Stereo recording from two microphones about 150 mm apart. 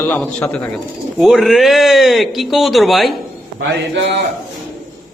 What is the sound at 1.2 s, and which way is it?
A man's voice, centre (ahead or behind).